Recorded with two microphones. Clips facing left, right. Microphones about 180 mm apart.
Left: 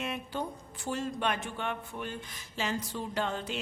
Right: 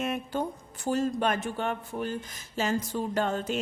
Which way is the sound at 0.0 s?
45° right (ahead or behind).